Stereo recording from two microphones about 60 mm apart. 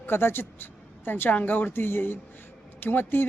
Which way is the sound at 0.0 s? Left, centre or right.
Left.